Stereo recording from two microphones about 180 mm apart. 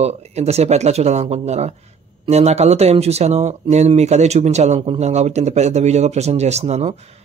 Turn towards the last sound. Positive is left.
turn(degrees=-40)  # may be behind; listen again after turning